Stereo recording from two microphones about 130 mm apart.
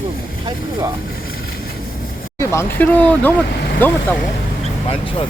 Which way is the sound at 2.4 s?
20° left (ahead or behind).